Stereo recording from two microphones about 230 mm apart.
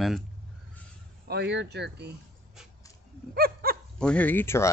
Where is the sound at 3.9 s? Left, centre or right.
Centre.